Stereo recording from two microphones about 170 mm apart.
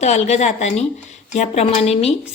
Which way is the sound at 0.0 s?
40° left (ahead or behind).